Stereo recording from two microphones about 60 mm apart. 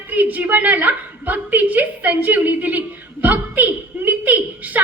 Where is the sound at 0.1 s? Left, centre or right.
Right.